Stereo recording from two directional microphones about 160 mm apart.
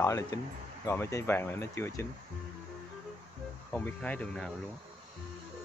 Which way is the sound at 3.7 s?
10° left (ahead or behind).